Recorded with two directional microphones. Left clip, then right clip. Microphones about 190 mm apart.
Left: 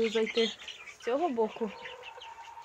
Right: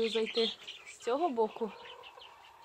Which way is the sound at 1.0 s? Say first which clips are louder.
Left 1 dB; 15° right (ahead or behind).